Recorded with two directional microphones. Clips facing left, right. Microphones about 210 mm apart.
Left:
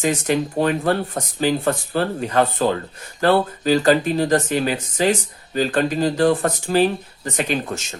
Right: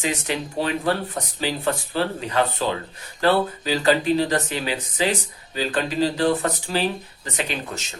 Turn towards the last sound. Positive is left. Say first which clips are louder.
# left 6 dB
turn(degrees=45)  # may be behind; listen again after turning